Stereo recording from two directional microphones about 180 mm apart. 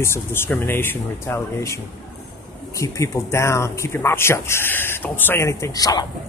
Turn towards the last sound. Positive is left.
turn(degrees=20)  # may be behind; listen again after turning